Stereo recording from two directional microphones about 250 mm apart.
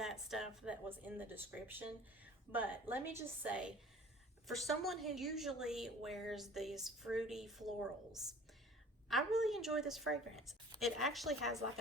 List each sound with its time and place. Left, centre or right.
0.0 s a woman's voice: centre